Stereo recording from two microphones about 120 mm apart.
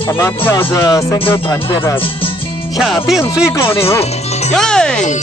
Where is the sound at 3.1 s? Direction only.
25° left (ahead or behind).